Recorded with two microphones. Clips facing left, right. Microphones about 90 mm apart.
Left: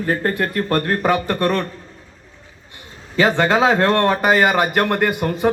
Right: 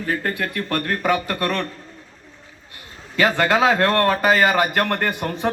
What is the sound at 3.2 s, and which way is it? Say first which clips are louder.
A man's voice: left 2 dB; 25° left (ahead or behind).